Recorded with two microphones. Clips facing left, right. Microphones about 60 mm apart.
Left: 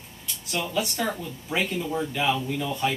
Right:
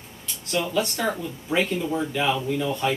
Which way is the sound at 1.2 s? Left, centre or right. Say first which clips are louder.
Right 4 dB; centre.